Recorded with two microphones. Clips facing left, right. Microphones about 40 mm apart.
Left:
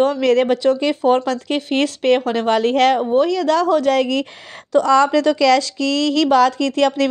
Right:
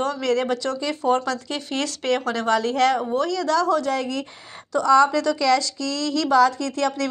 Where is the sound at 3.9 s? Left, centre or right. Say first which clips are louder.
Left 8 dB; left.